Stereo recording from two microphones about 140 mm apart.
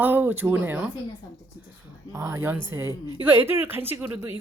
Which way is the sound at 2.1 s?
20° right (ahead or behind).